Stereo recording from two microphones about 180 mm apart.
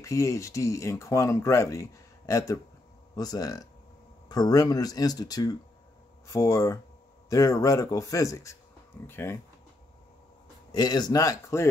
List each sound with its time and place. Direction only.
0.0 s speech: 15° left (ahead or behind)
10.7 s speech: 25° left (ahead or behind)